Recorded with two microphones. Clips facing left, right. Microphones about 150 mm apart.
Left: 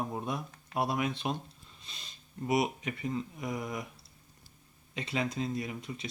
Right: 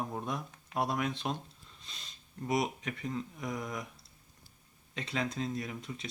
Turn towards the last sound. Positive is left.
turn(degrees=5)  # may be behind; listen again after turning